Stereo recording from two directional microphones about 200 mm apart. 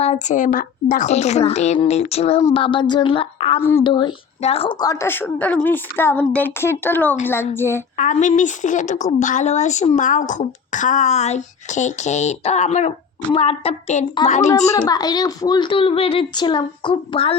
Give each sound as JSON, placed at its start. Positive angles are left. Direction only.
{"t": 0.0, "sound": "a woman's voice", "side_deg": 35}
{"t": 3.6, "sound": "a woman's voice", "side_deg": 15}
{"t": 3.8, "sound": "a woman's voice", "side_deg": 25}
{"t": 7.9, "sound": "speech", "side_deg": 40}
{"t": 14.8, "sound": "a woman's voice", "side_deg": 20}